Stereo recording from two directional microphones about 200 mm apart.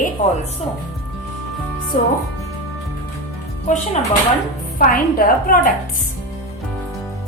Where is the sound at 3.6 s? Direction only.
35° left (ahead or behind).